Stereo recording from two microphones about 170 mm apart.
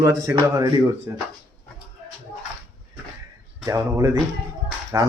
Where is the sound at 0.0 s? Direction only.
20° right (ahead or behind).